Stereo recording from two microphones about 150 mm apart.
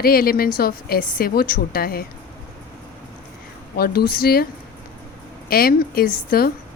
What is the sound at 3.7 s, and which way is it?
Speech, 90° left.